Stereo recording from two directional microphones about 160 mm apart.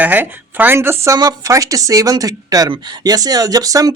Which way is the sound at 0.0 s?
10° right (ahead or behind).